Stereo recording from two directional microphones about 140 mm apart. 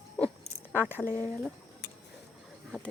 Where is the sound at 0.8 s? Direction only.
15° left (ahead or behind).